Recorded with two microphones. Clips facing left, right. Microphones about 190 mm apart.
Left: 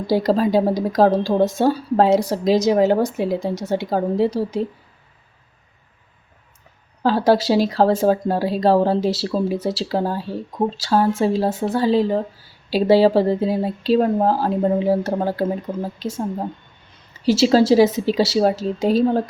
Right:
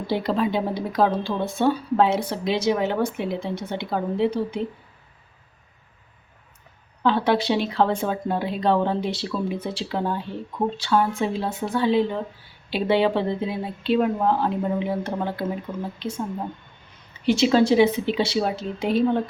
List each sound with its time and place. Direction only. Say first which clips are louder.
0.1 s speech: left 6 dB; 40° left (ahead or behind)
7.0 s speech: left 4 dB; 40° left (ahead or behind)